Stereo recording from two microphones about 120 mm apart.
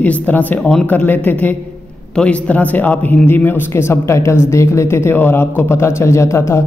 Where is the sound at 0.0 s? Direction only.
15° left (ahead or behind).